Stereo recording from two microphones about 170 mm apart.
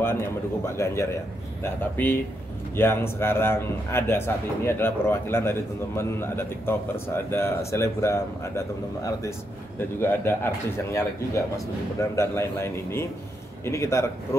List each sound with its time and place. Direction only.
0.0 s a man's voice: 15° left (ahead or behind)